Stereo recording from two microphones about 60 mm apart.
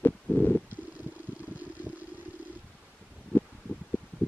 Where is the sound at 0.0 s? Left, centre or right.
Left.